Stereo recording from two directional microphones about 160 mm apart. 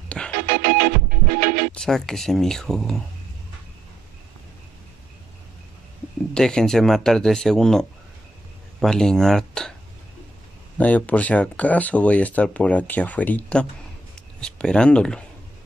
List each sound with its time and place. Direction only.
0.2 s music: centre (ahead or behind)
0.5 s music: 70° right (ahead or behind)
1.7 s speech: 5° left (ahead or behind)
6.3 s speech: 5° left (ahead or behind)
10.8 s speech: 10° left (ahead or behind)